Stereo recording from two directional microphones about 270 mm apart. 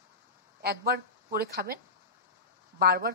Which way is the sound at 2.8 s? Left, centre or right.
Right.